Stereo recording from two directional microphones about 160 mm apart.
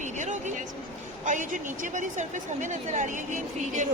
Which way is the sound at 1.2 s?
50° right (ahead or behind).